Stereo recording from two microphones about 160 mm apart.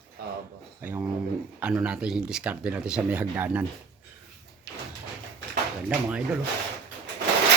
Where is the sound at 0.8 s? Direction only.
10° right (ahead or behind).